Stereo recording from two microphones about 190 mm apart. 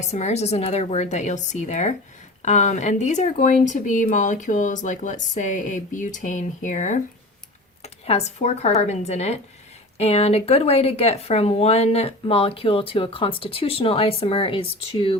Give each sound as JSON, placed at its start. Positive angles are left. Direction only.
{"t": 0.0, "sound": "speech", "side_deg": 35}